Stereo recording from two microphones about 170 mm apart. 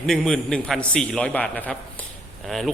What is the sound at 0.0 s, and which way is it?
A man's voice, 5° left (ahead or behind).